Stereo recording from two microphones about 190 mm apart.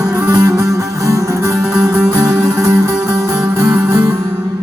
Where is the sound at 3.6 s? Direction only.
15° right (ahead or behind).